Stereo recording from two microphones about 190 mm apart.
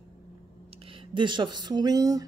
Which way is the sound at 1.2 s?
25° right (ahead or behind).